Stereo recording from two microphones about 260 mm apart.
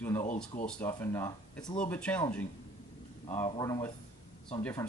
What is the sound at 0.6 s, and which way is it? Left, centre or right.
Speech, centre.